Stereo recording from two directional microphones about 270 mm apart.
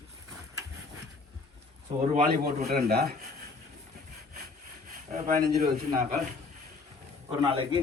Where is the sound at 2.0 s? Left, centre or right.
Right.